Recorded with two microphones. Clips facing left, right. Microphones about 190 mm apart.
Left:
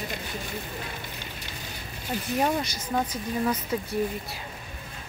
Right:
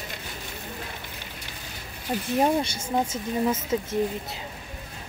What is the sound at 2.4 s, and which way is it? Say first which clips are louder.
Speech: right 4 dB; 25° right (ahead or behind).